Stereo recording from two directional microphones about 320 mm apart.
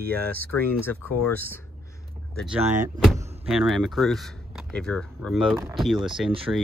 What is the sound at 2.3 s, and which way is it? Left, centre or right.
Speech, centre.